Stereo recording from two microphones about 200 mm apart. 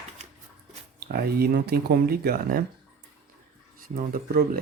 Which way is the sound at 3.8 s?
45° right (ahead or behind).